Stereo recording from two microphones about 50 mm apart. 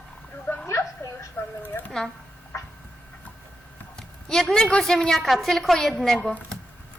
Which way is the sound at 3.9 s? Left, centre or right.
Centre.